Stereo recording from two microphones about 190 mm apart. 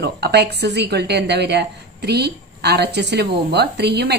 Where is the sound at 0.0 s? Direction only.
60° right (ahead or behind).